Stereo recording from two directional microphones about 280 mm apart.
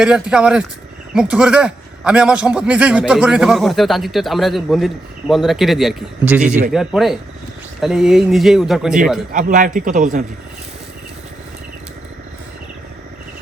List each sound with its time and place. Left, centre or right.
0.0 s a man's voice: centre
9.3 s a man's voice: right